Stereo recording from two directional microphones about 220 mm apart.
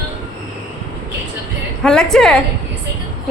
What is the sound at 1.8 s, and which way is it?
Speech, centre (ahead or behind).